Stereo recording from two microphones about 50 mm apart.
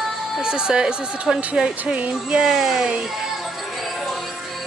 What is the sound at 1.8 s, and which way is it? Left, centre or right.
Speech, right.